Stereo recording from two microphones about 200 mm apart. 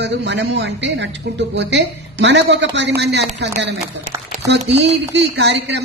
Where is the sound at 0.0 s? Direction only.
60° right (ahead or behind).